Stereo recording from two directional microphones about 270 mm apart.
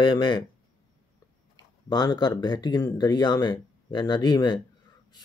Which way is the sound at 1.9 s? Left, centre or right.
Centre.